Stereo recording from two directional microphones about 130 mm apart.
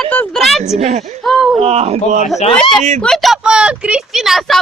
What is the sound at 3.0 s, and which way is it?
Speech, centre (ahead or behind).